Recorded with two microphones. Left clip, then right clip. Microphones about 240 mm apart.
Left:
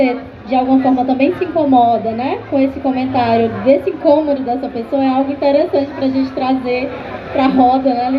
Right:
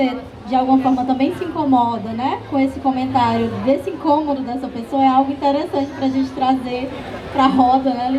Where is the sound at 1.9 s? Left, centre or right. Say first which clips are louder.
Left 6 dB; right.